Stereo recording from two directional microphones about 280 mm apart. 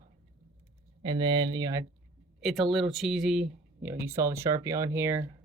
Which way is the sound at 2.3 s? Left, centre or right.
Centre.